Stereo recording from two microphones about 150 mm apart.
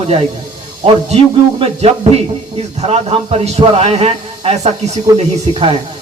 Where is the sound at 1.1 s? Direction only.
45° right (ahead or behind).